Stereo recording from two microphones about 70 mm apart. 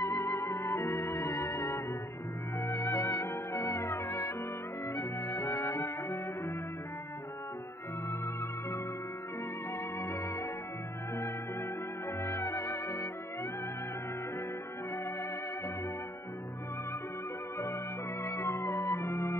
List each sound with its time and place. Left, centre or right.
0.0 s music: left
9.9 s music: left
12.2 s music: left
18.2 s music: left